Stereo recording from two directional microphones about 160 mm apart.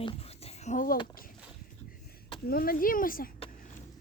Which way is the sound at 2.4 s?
65° left (ahead or behind).